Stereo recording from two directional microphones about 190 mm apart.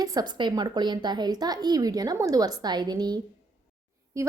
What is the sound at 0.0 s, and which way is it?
Speech, 20° right (ahead or behind).